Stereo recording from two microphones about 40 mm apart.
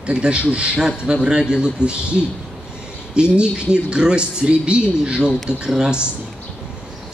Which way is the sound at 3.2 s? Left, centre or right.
Right.